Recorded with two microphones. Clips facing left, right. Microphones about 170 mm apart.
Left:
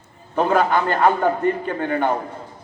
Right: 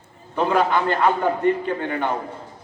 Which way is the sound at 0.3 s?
45° left (ahead or behind).